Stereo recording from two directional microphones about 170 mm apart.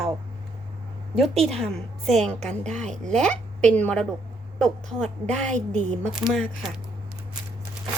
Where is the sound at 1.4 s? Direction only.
Centre (ahead or behind).